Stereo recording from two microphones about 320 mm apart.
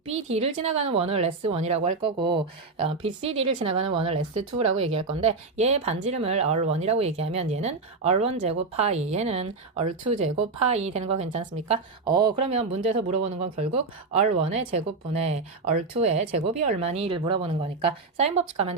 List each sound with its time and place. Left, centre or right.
0.3 s speech: centre
4.7 s speech: right
5.2 s speech: centre